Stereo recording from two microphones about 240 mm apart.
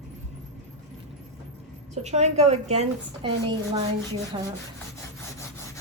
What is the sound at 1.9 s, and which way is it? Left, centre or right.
A woman's voice, right.